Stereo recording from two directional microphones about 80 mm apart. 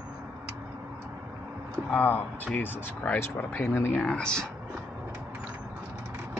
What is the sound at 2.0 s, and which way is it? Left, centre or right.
Speech, left.